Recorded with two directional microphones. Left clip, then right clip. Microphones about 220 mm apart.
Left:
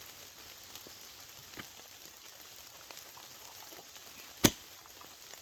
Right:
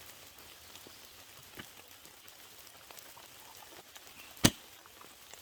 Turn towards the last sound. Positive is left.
turn(degrees=25)  # may be behind; listen again after turning